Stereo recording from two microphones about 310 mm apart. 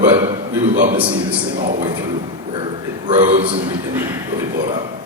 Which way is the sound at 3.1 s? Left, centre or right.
Right.